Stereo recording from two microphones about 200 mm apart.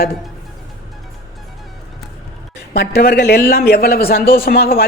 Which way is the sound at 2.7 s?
55° left (ahead or behind).